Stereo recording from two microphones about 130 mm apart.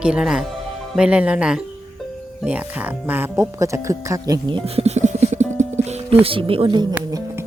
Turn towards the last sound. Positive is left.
turn(degrees=-40)  # may be behind; listen again after turning